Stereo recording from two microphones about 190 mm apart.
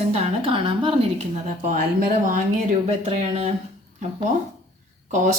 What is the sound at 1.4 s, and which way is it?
Speech, 40° right (ahead or behind).